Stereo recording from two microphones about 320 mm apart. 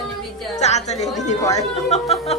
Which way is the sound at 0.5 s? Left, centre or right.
Left.